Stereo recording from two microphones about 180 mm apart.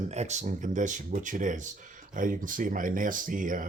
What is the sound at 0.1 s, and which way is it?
Speech, 40° right (ahead or behind).